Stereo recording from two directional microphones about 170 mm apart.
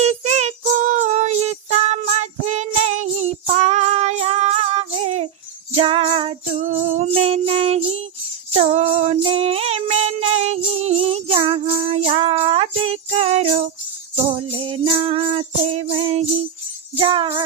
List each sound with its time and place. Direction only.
0.0 s child singing: 40° right (ahead or behind)
5.7 s music: 35° right (ahead or behind)
17.0 s jingle bell: 30° right (ahead or behind)